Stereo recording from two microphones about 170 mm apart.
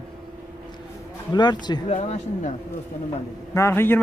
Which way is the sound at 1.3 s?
25° left (ahead or behind).